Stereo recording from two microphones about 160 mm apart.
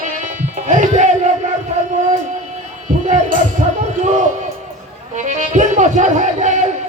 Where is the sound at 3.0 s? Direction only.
50° right (ahead or behind).